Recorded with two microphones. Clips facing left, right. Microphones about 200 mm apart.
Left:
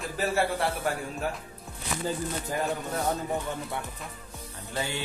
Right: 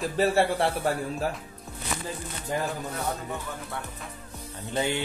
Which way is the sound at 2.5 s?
25° right (ahead or behind).